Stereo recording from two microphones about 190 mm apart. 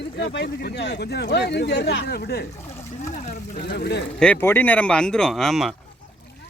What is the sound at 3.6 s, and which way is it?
Speech, 55° left (ahead or behind).